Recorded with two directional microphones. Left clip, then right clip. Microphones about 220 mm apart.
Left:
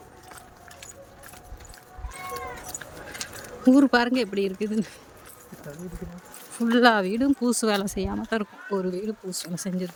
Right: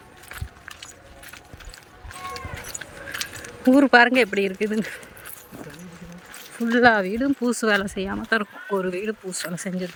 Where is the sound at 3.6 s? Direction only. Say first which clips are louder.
Right 5 dB; centre (ahead or behind).